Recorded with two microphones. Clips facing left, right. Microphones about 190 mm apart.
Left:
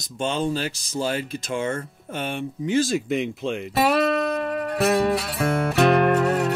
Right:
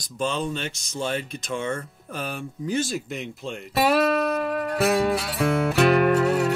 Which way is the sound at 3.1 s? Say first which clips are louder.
Left 8 dB; 90° left.